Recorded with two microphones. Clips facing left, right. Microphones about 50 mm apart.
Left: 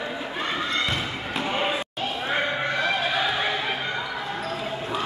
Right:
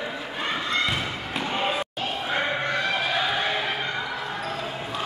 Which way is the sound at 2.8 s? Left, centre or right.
Centre.